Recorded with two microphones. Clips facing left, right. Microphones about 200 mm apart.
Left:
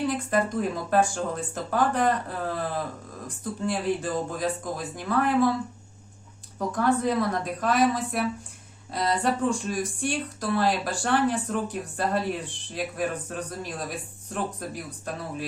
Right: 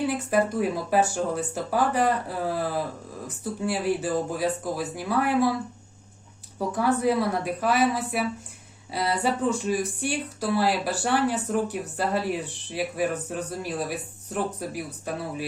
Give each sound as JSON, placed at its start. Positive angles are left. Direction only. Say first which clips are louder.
{"t": 0.1, "sound": "speech", "louder": "right 2 dB", "side_deg": -10}
{"t": 6.6, "sound": "speech", "louder": "even", "side_deg": -5}